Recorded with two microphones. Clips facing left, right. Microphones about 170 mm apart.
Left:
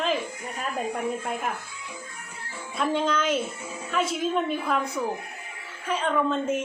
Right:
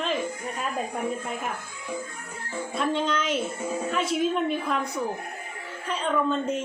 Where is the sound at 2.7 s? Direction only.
Centre (ahead or behind).